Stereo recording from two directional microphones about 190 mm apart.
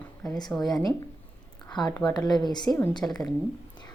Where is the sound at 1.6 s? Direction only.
20° left (ahead or behind).